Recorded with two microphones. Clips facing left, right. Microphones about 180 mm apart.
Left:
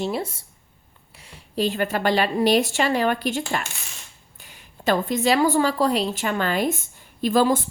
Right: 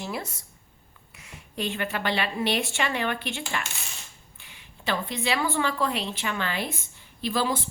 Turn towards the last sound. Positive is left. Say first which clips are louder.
# left 8 dB
turn(degrees=45)  # may be behind; listen again after turning